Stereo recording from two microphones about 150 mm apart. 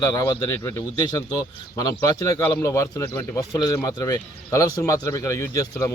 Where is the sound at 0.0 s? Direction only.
25° left (ahead or behind).